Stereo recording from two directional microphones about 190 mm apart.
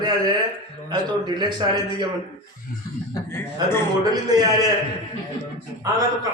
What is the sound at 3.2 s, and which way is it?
Speech, 10° left (ahead or behind).